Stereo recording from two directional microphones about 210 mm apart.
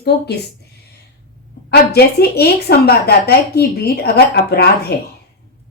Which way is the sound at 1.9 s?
50° left (ahead or behind).